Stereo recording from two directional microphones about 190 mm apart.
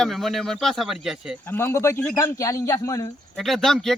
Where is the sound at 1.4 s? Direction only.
15° left (ahead or behind).